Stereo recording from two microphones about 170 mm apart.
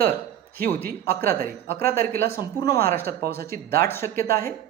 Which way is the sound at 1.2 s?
60° right (ahead or behind).